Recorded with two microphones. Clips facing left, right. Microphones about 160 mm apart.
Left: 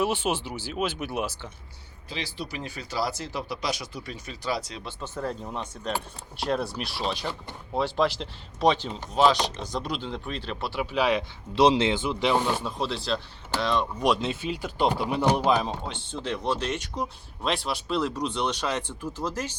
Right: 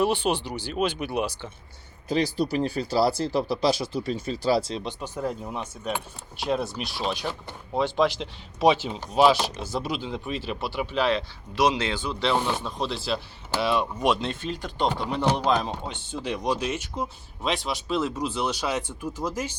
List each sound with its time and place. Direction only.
0.0 s speech: 5° left (ahead or behind)
2.0 s speech: 40° right (ahead or behind); by 11.0 s centre (ahead or behind)
11.5 s speech: 30° left (ahead or behind); by 16.0 s centre (ahead or behind)
16.1 s speech: 10° right (ahead or behind)